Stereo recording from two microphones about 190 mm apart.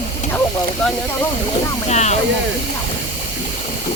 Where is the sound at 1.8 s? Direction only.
35° left (ahead or behind).